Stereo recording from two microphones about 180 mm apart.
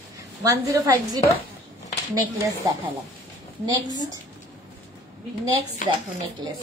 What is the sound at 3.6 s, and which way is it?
Speech, 20° right (ahead or behind).